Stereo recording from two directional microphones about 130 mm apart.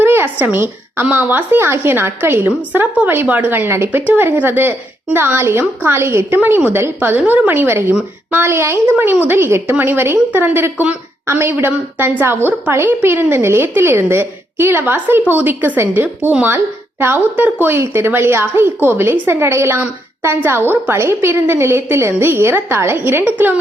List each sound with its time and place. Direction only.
0.0 s a woman's voice: 15° right (ahead or behind)